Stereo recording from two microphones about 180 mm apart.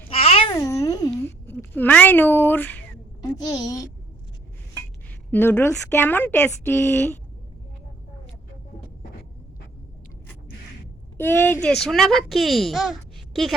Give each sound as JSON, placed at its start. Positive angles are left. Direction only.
{"t": 0.1, "sound": "babbling", "side_deg": 35}
{"t": 0.5, "sound": "a child's voice", "side_deg": 15}
{"t": 3.2, "sound": "a woman's voice", "side_deg": 20}
{"t": 5.3, "sound": "speech", "side_deg": 10}
{"t": 11.2, "sound": "speech", "side_deg": 10}